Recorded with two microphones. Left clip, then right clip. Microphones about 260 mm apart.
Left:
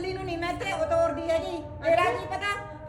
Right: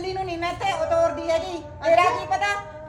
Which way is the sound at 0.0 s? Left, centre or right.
Centre.